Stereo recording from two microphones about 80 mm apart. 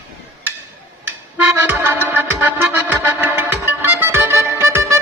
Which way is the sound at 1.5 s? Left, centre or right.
Right.